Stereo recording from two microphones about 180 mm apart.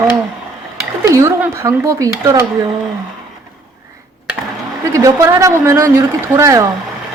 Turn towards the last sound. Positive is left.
turn(degrees=-15)  # may be behind; listen again after turning